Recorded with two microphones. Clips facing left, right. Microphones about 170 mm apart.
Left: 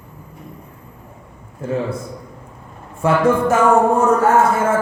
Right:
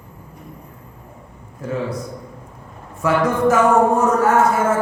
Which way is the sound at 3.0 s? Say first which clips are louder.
Left 2 dB; 30° left (ahead or behind).